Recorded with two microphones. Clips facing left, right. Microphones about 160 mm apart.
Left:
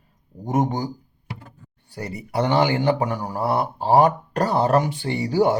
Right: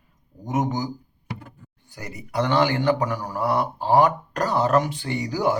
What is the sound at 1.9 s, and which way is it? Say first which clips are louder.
Speech: left 5 dB; 30° left (ahead or behind).